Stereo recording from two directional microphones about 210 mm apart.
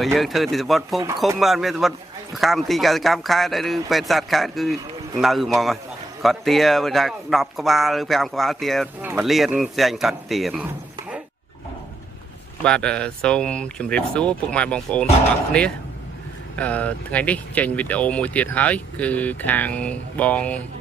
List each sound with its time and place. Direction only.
0.0 s a man's voice: centre (ahead or behind)
12.6 s a man's voice: 5° left (ahead or behind)